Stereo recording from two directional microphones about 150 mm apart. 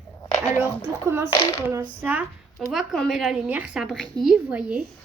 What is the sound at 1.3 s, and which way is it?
Speech, 25° left (ahead or behind).